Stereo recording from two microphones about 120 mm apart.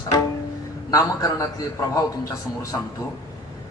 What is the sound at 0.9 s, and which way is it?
A man's voice, 30° left (ahead or behind).